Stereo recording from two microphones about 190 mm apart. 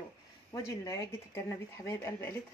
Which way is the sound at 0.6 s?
15° left (ahead or behind).